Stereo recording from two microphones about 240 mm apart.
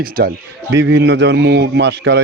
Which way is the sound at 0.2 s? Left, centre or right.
Right.